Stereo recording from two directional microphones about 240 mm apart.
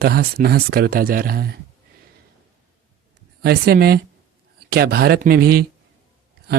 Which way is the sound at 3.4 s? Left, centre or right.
Right.